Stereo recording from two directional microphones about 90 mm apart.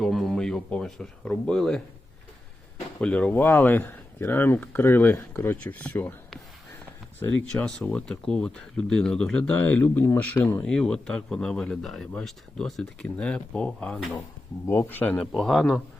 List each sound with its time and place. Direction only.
0.0 s speech: centre (ahead or behind)
3.0 s speech: 15° left (ahead or behind)
7.2 s speech: 25° left (ahead or behind)
7.4 s speech: 10° left (ahead or behind)
10.6 s speech: 10° left (ahead or behind)
14.7 s speech: 25° left (ahead or behind)
15.3 s speech: 5° left (ahead or behind)